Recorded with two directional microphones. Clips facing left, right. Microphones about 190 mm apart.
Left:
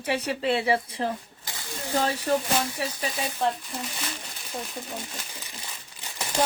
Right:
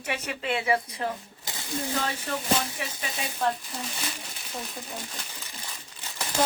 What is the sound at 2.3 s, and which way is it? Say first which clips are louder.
Speech: left 11 dB; 40° left (ahead or behind).